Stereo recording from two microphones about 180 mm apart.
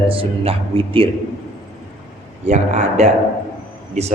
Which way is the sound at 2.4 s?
40° right (ahead or behind).